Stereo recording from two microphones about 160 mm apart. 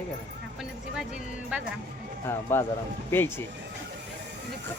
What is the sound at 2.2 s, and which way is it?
Speech, 15° left (ahead or behind).